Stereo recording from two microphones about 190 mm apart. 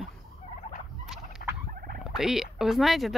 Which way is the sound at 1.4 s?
45° left (ahead or behind).